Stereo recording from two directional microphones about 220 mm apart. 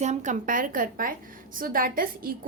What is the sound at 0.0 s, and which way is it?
A woman's voice, 30° right (ahead or behind).